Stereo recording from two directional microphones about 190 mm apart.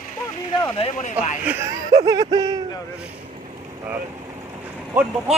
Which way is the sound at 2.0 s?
20° right (ahead or behind).